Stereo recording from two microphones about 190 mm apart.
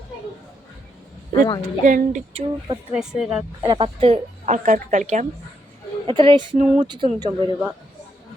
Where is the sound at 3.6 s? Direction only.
25° right (ahead or behind); by 5.2 s 40° right (ahead or behind).